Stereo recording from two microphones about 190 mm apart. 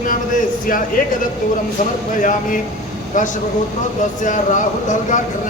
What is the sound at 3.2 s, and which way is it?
Speech, 40° left (ahead or behind).